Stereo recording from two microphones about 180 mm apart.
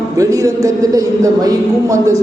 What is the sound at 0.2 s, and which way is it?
A woman's voice, 20° right (ahead or behind).